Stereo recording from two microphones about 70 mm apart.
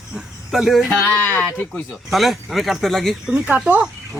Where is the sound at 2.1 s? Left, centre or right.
Centre.